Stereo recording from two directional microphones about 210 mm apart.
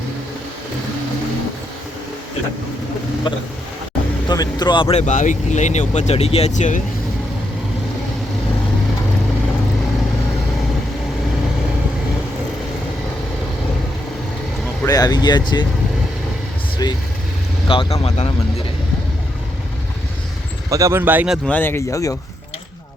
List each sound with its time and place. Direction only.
3.3 s speech: 25° left (ahead or behind)
14.8 s speech: 20° left (ahead or behind)
16.8 s speech: 20° left (ahead or behind)
20.7 s speech: 15° right (ahead or behind)
21.4 s speech: 10° left (ahead or behind)